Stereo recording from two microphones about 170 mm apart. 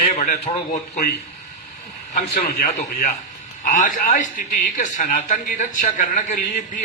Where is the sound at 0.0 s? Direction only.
55° left (ahead or behind).